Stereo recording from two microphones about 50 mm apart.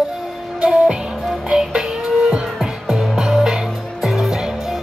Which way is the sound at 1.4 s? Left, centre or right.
Centre.